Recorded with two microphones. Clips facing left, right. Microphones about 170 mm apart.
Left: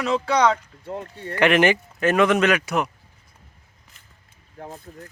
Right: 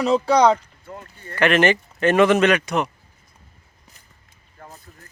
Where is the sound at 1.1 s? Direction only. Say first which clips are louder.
Left 7 dB; 80° left.